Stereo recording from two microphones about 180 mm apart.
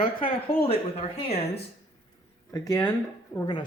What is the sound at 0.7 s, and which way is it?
Speech, 35° left (ahead or behind).